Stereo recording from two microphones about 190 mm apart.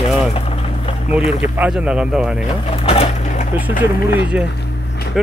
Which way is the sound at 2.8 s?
30° left (ahead or behind).